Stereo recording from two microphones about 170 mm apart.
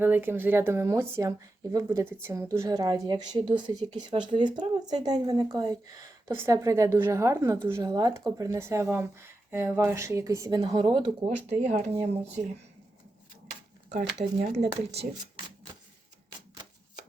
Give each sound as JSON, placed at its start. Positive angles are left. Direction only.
{"t": 0.0, "sound": "a woman's voice", "side_deg": -10}
{"t": 10.6, "sound": "a woman's voice", "side_deg": -30}
{"t": 11.7, "sound": "speech", "side_deg": -40}
{"t": 14.0, "sound": "speech", "side_deg": -85}
{"t": 14.3, "sound": "speech", "side_deg": -45}